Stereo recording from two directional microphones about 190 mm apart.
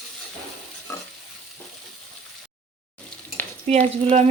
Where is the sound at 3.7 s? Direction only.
35° right (ahead or behind).